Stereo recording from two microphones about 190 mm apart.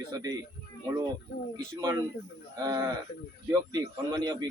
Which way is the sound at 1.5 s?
20° right (ahead or behind).